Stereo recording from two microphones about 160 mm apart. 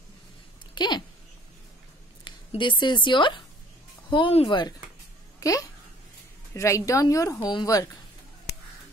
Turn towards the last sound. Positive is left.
turn(degrees=25)  # may be behind; listen again after turning